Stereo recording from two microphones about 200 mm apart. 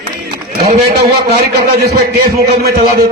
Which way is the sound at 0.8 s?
55° right (ahead or behind).